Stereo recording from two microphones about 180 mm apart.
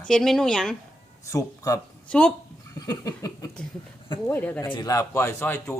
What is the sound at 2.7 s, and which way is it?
A man's voice, 20° left (ahead or behind).